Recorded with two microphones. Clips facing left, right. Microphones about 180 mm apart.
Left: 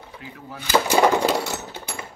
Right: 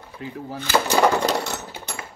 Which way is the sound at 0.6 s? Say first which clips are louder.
Left 1 dB; 10° left (ahead or behind).